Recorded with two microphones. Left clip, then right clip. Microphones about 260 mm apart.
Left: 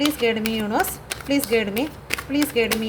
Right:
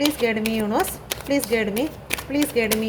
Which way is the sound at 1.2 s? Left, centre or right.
Left.